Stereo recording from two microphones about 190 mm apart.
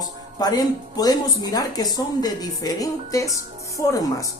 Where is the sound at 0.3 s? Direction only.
20° left (ahead or behind).